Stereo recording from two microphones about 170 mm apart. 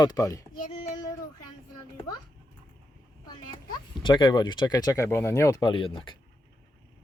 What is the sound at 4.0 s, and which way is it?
Speech, 30° left (ahead or behind).